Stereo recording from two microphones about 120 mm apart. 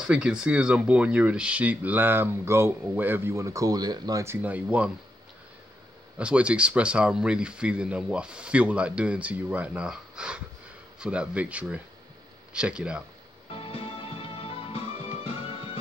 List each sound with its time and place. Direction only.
0.0 s speech: 5° right (ahead or behind)
6.1 s speech: 10° right (ahead or behind)
13.7 s music: 50° left (ahead or behind)